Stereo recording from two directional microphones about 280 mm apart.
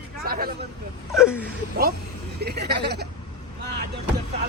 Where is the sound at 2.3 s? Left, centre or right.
Right.